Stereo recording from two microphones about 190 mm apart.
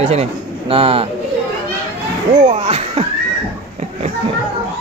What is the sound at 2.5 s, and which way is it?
Speech, 30° right (ahead or behind).